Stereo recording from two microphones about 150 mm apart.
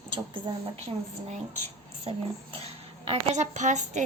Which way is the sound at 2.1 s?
45° right (ahead or behind).